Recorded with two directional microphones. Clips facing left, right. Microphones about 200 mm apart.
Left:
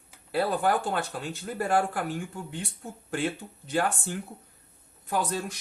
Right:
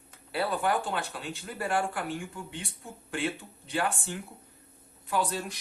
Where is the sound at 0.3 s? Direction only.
45° left (ahead or behind).